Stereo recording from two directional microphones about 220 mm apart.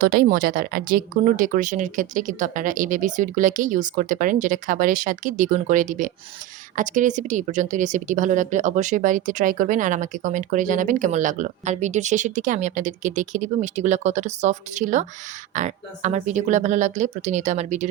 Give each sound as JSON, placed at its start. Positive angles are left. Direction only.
{"t": 0.0, "sound": "speech", "side_deg": -45}